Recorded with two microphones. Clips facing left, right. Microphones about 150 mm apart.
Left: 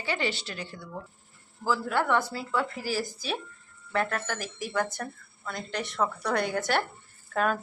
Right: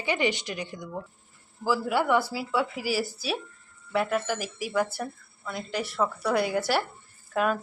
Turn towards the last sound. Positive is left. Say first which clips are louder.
# right 1 dB
turn(degrees=-5)  # may be behind; listen again after turning